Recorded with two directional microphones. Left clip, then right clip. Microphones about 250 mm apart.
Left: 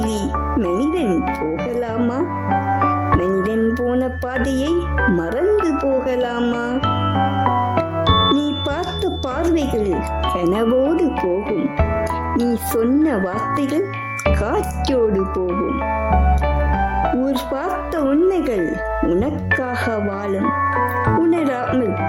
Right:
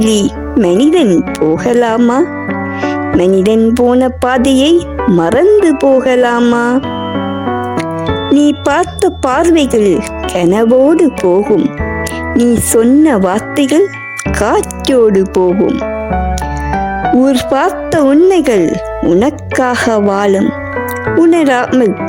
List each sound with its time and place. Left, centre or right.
0.6 s speech: right
8.0 s music: centre
8.6 s speech: right
12.4 s speech: right
17.2 s speech: right